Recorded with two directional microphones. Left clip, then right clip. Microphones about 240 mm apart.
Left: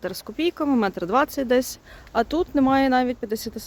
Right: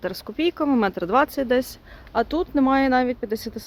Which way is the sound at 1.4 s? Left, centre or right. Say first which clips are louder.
Left 1 dB; left.